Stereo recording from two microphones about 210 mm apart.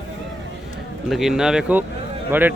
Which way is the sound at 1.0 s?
Centre (ahead or behind).